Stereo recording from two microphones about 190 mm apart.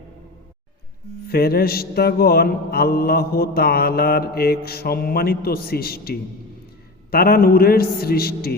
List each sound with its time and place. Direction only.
1.3 s mantra: 55° left (ahead or behind)